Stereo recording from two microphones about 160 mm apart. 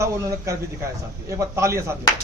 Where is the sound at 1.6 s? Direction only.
20° right (ahead or behind).